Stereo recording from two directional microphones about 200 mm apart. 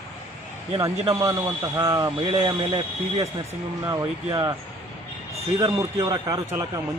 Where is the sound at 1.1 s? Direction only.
15° right (ahead or behind).